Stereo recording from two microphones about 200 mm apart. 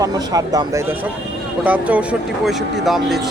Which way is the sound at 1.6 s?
5° right (ahead or behind).